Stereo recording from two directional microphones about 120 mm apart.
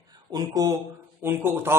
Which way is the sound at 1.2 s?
20° right (ahead or behind).